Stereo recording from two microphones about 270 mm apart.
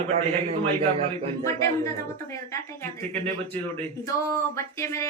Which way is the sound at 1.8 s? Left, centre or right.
Centre.